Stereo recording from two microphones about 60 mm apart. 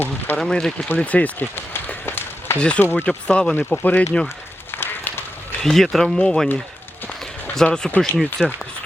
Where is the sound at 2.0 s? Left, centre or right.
Left.